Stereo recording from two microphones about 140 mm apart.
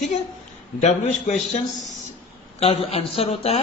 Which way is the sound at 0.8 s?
55° left (ahead or behind).